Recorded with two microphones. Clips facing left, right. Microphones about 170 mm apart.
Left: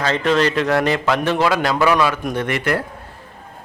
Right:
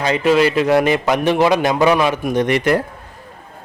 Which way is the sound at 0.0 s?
10° right (ahead or behind).